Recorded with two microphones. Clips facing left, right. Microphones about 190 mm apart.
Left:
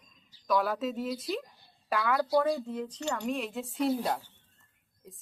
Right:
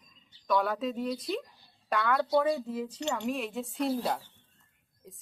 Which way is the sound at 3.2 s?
Centre (ahead or behind).